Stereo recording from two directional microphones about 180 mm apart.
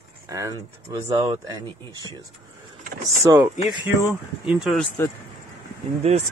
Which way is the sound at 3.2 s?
15° right (ahead or behind).